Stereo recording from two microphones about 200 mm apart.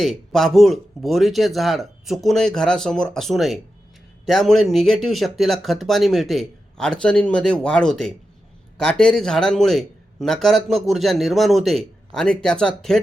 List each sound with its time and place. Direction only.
0.0 s a man's voice: centre (ahead or behind)